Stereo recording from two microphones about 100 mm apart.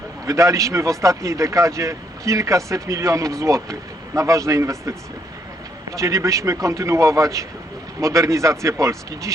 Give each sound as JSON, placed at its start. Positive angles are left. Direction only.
{"t": 0.3, "sound": "a man's voice", "side_deg": -30}